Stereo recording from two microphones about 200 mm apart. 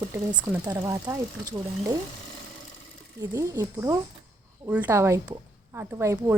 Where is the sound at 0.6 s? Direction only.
15° right (ahead or behind).